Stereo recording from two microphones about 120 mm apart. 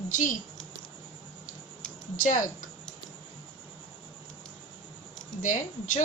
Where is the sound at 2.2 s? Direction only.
90° left.